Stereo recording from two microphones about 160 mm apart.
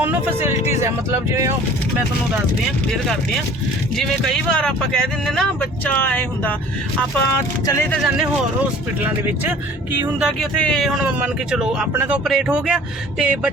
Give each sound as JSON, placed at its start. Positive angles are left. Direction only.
{"t": 0.0, "sound": "speech", "side_deg": -10}
{"t": 3.9, "sound": "speech", "side_deg": 5}
{"t": 7.7, "sound": "speech", "side_deg": 15}
{"t": 7.9, "sound": "speech", "side_deg": -5}
{"t": 10.6, "sound": "speech", "side_deg": 5}